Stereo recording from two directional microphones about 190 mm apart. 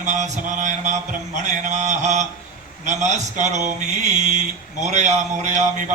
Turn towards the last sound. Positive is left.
turn(degrees=-40)  # may be behind; listen again after turning